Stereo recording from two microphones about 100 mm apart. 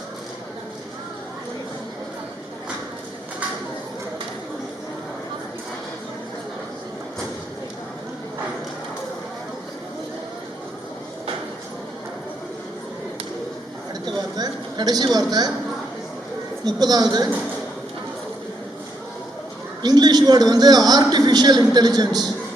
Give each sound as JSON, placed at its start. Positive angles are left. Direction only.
{"t": 14.0, "sound": "a sound", "side_deg": -45}
{"t": 16.6, "sound": "a man's voice", "side_deg": -40}
{"t": 19.8, "sound": "a man's voice", "side_deg": -45}